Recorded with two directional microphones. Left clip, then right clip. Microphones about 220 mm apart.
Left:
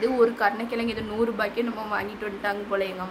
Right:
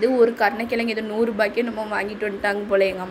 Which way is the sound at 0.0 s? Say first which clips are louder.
Right 4 dB; 10° right (ahead or behind).